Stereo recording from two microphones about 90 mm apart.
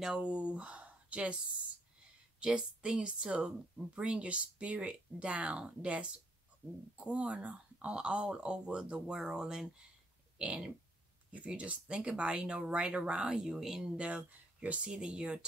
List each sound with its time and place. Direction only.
0.0 s speech: 10° right (ahead or behind)
2.4 s speech: 10° right (ahead or behind)